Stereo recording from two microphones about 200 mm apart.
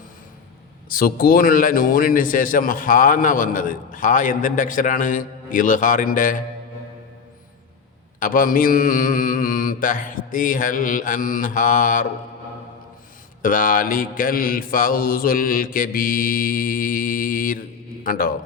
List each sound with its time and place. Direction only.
0.9 s a man's voice: 45° left (ahead or behind)
8.2 s a man's voice: 45° left (ahead or behind)
13.4 s a man's voice: 40° left (ahead or behind)